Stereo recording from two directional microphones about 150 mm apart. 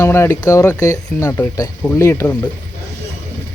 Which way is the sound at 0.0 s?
15° left (ahead or behind).